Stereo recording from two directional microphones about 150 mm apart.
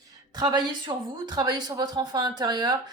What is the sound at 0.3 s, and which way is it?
Speech, 25° right (ahead or behind).